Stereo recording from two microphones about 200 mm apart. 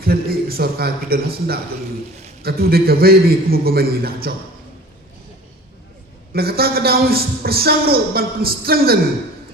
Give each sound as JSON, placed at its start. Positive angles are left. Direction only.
{"t": 0.0, "sound": "a sound", "side_deg": -50}
{"t": 2.4, "sound": "a man's voice", "side_deg": -50}
{"t": 6.3, "sound": "a man's voice", "side_deg": -50}